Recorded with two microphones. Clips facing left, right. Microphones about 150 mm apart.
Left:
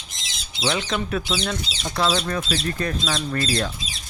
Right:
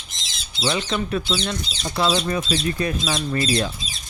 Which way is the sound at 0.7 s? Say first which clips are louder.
Right 1 dB; centre (ahead or behind).